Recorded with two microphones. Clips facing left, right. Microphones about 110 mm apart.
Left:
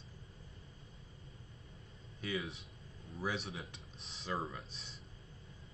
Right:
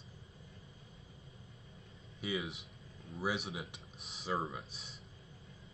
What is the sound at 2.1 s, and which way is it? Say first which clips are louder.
Speech: right 1 dB; 10° right (ahead or behind).